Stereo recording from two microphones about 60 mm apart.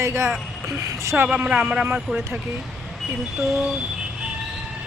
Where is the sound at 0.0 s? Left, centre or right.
Right.